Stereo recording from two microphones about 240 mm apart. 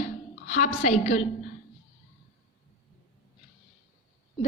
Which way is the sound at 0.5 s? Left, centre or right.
Left.